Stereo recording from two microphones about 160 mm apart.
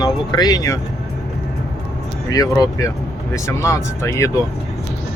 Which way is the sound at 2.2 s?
20° left (ahead or behind).